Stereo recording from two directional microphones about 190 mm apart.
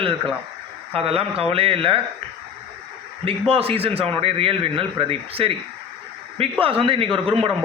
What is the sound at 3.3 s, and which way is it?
A man's voice, 30° right (ahead or behind).